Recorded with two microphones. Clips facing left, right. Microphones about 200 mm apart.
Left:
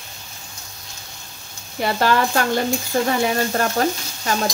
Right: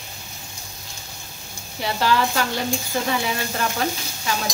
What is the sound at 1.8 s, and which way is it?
Stir, 50° left (ahead or behind).